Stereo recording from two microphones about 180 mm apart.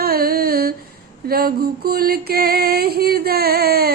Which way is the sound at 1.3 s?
55° right (ahead or behind).